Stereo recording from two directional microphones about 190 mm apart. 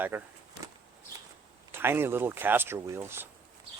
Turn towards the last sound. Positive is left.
turn(degrees=-15)  # may be behind; listen again after turning